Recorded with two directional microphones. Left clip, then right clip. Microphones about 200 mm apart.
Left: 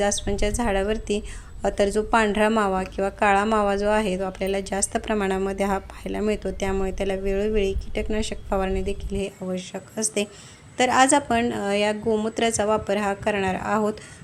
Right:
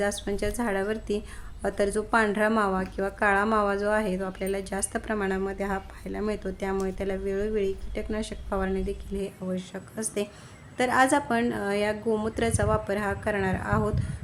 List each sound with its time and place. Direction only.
0.0 s speech: 10° left (ahead or behind)